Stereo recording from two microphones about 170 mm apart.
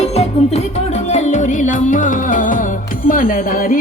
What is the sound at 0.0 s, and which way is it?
Music, 40° left (ahead or behind).